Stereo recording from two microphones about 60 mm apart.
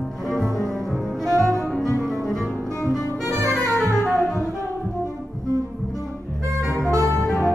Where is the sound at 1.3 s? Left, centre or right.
Right.